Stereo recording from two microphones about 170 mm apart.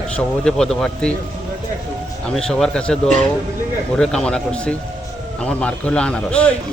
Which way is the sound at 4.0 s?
5° left (ahead or behind).